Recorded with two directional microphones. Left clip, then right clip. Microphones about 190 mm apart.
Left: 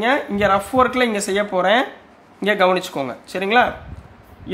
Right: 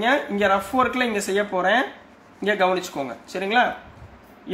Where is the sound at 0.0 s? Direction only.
25° left (ahead or behind).